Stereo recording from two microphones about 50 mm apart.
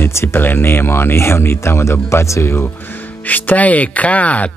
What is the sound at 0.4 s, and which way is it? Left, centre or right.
Speech, left.